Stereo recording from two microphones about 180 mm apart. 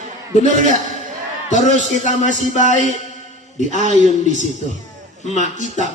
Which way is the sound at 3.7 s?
40° right (ahead or behind).